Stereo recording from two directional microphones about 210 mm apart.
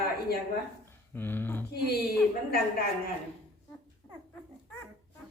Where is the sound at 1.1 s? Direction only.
10° left (ahead or behind).